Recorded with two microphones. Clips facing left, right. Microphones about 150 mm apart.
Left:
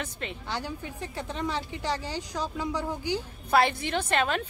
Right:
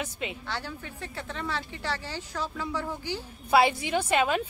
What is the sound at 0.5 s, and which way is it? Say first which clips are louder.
Speech: left 2 dB; 15° left (ahead or behind).